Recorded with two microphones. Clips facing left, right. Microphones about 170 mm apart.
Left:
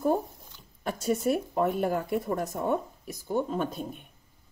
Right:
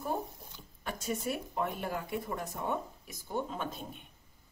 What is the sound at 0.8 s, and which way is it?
Speech, 45° left (ahead or behind).